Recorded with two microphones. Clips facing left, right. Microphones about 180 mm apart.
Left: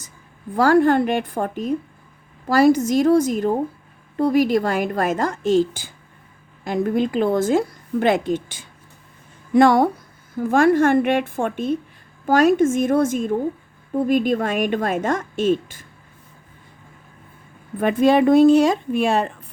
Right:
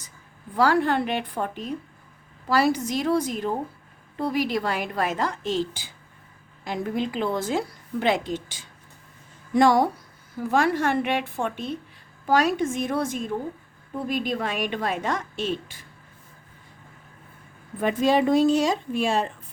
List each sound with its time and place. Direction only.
0.5 s a woman's voice: 45° left (ahead or behind)
17.7 s a woman's voice: 60° left (ahead or behind)